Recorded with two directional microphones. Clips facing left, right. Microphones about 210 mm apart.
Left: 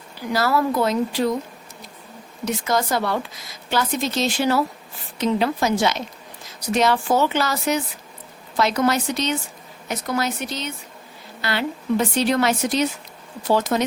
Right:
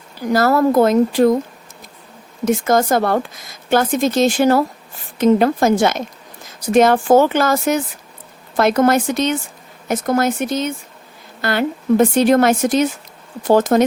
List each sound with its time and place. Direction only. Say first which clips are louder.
0.2 s a woman's voice: right 6 dB; 45° right (ahead or behind)
2.4 s a woman's voice: right 7 dB; 50° right (ahead or behind)